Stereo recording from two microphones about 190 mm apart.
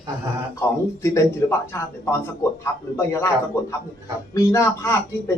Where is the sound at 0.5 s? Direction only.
15° left (ahead or behind).